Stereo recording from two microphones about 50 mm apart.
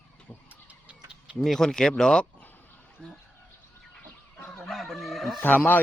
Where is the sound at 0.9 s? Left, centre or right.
Right.